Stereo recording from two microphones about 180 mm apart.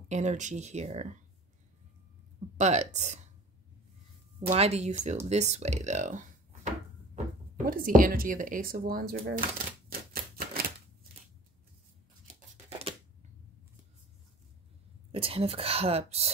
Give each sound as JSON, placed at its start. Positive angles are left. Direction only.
{"t": 0.1, "sound": "speech", "side_deg": -40}
{"t": 2.5, "sound": "speech", "side_deg": -40}
{"t": 4.5, "sound": "speech", "side_deg": -35}
{"t": 9.8, "sound": "typewriter", "side_deg": -55}
{"t": 12.4, "sound": "a sound", "side_deg": -35}
{"t": 15.1, "sound": "speech", "side_deg": -30}